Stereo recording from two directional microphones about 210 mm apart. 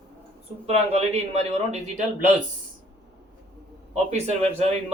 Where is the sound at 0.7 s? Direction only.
30° right (ahead or behind).